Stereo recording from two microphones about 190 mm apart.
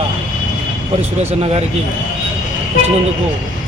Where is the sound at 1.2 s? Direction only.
30° right (ahead or behind).